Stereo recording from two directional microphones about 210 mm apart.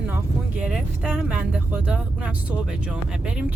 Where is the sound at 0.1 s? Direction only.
5° right (ahead or behind).